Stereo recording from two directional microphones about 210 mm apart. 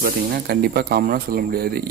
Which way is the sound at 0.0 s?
50° right (ahead or behind).